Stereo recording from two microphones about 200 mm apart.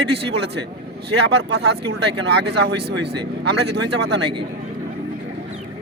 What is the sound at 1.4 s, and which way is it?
Speech, 75° right (ahead or behind).